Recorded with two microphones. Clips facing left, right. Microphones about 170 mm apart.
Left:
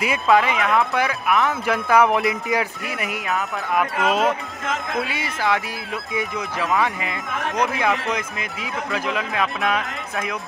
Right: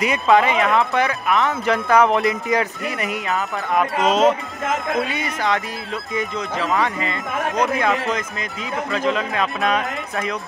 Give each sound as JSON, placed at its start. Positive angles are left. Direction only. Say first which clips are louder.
{"t": 0.0, "sound": "speech", "louder": "right 2 dB", "side_deg": 5}
{"t": 4.0, "sound": "speech", "louder": "right 5 dB", "side_deg": -20}
{"t": 4.9, "sound": "speech", "louder": "right 3 dB", "side_deg": 5}